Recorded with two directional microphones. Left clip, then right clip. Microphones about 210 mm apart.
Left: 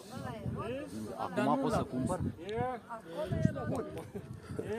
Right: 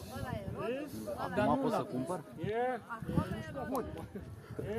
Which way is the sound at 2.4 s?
35° right (ahead or behind).